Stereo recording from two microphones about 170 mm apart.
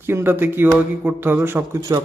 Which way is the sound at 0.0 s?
15° right (ahead or behind).